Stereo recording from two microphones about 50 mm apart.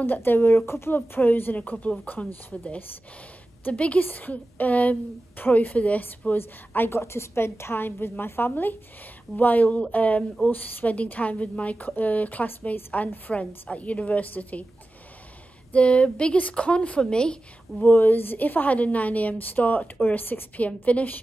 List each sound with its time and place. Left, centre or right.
0.0 s a woman's voice: left
0.9 s a woman's voice: left
3.7 s a woman's voice: left
6.3 s a woman's voice: left
7.0 s a woman's voice: left
15.7 s speech: left
17.8 s a woman's voice: left
20.6 s a woman's voice: left